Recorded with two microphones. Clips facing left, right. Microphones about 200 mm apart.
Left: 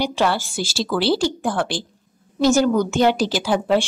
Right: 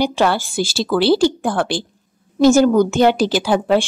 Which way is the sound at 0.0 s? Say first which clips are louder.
Right 4 dB; 55° right (ahead or behind).